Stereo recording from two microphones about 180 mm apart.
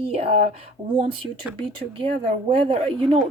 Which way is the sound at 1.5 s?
30° right (ahead or behind).